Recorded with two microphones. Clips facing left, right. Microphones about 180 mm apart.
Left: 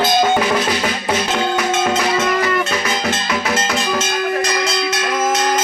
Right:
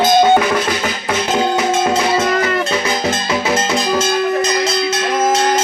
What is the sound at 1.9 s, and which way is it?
Music, 30° right (ahead or behind).